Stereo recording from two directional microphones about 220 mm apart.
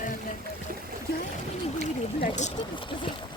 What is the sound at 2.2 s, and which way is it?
Speech, 30° left (ahead or behind).